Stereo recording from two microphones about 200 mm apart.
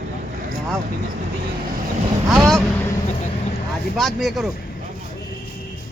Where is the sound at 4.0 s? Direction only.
Centre (ahead or behind).